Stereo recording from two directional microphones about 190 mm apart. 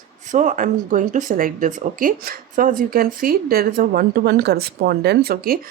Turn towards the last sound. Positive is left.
turn(degrees=-50)  # may be behind; listen again after turning